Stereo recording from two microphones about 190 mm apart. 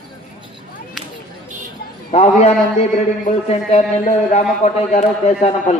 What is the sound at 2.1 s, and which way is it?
A man's voice, 35° left (ahead or behind).